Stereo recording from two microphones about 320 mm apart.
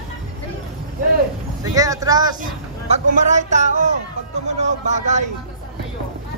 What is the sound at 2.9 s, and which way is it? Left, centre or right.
A man's voice, right.